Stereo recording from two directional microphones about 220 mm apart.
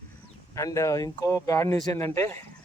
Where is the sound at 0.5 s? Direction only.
15° left (ahead or behind).